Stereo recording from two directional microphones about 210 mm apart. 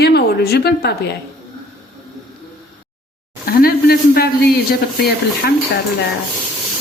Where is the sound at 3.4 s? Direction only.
45° left (ahead or behind).